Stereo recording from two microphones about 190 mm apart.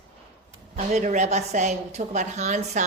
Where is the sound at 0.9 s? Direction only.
40° right (ahead or behind).